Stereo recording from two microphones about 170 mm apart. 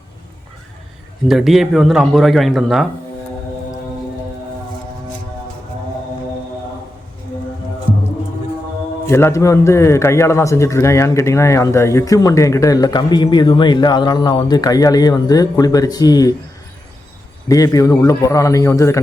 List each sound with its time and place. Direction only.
1.3 s speech: centre (ahead or behind)
9.0 s a man's voice: 15° left (ahead or behind)
17.5 s a man's voice: 20° left (ahead or behind)